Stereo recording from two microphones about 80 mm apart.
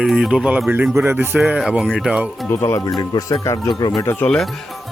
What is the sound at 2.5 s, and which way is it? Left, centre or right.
Speech, left.